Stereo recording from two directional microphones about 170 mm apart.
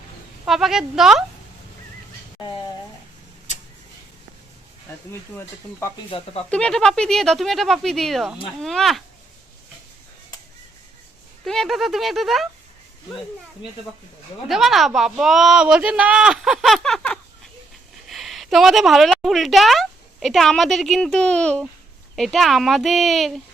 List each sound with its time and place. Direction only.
0.4 s speech: centre (ahead or behind)
5.3 s speech: 15° left (ahead or behind)
6.1 s speech: 35° left (ahead or behind)
6.5 s speech: 5° left (ahead or behind)
11.4 s speech: centre (ahead or behind)
14.4 s a woman's voice: centre (ahead or behind)